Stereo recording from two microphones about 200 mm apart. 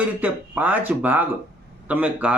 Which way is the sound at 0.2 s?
10° right (ahead or behind).